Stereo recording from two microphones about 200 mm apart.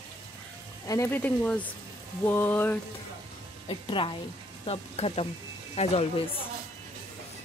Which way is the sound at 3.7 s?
25° left (ahead or behind).